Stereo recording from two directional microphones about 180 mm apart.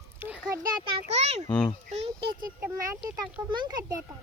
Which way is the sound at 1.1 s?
35° right (ahead or behind).